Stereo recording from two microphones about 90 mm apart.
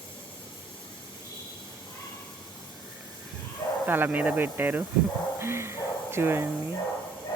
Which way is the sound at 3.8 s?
20° right (ahead or behind).